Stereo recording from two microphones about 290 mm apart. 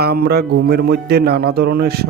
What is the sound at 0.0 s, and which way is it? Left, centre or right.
Speech, right.